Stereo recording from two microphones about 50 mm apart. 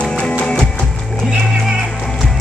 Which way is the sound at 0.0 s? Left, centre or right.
Left.